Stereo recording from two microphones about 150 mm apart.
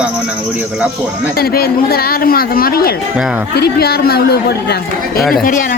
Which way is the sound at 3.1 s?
5° right (ahead or behind).